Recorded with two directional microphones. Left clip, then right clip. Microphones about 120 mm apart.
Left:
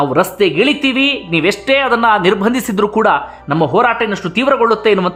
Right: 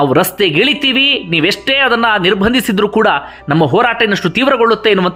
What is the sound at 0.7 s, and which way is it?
Speech, 20° right (ahead or behind).